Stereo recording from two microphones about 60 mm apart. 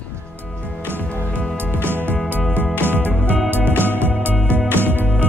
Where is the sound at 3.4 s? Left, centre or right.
Right.